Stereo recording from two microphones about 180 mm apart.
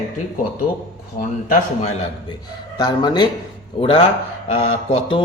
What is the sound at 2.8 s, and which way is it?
A man's voice, 25° left (ahead or behind).